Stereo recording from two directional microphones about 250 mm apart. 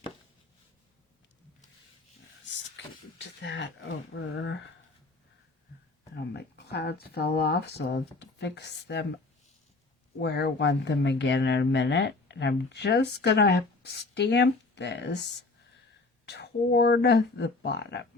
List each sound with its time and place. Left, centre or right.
2.4 s speech: left
6.1 s speech: left
10.2 s speech: left